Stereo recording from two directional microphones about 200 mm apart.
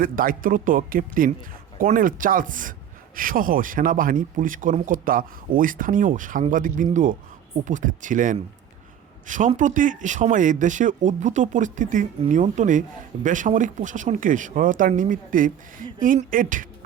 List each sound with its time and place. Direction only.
0.0 s speech: 45° right (ahead or behind)